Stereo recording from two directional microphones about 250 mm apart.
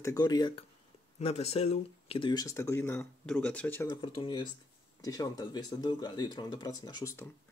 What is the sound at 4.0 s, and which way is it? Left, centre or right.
Speech, centre.